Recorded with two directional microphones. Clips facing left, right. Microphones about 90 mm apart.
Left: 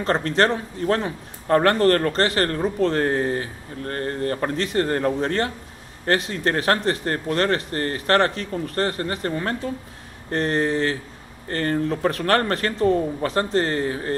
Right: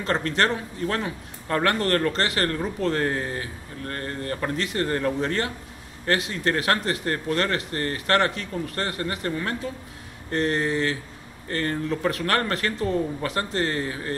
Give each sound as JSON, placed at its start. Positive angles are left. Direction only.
{"t": 0.0, "sound": "speech", "side_deg": 35}